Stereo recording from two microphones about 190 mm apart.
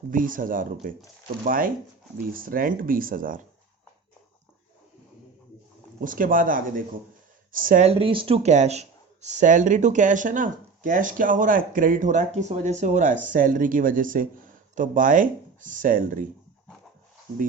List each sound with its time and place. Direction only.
0.1 s speech: 45° right (ahead or behind)
6.0 s speech: 45° right (ahead or behind)